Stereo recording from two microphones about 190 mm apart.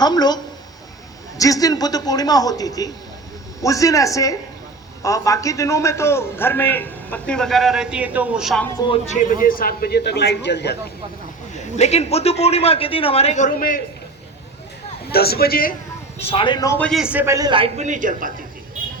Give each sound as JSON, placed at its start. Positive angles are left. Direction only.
{"t": 0.0, "sound": "a man's voice", "side_deg": 20}
{"t": 1.4, "sound": "a man's voice", "side_deg": 20}
{"t": 8.9, "sound": "speech", "side_deg": 40}
{"t": 11.8, "sound": "speech", "side_deg": 35}
{"t": 15.1, "sound": "speech", "side_deg": 55}
{"t": 16.1, "sound": "a man's voice", "side_deg": 30}
{"t": 17.0, "sound": "a man's voice", "side_deg": -10}